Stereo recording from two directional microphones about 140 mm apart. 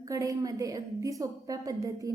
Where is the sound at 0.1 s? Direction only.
25° right (ahead or behind).